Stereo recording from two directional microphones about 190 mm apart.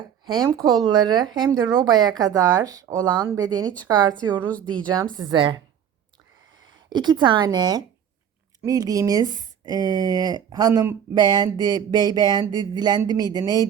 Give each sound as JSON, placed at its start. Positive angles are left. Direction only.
{"t": 0.3, "sound": "speech", "side_deg": -20}
{"t": 4.3, "sound": "a woman's voice", "side_deg": 10}
{"t": 5.1, "sound": "speech", "side_deg": -25}
{"t": 6.9, "sound": "speech", "side_deg": -25}